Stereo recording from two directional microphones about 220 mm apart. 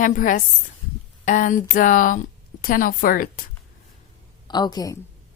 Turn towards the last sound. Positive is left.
turn(degrees=15)  # may be behind; listen again after turning